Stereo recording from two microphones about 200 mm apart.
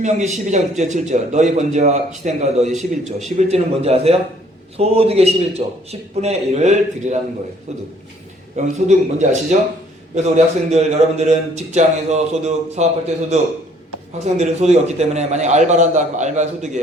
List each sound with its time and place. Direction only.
0.0 s a man's voice: 35° right (ahead or behind)
14.2 s a man's voice: 35° right (ahead or behind)